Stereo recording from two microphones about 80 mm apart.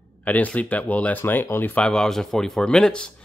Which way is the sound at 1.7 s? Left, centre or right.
Centre.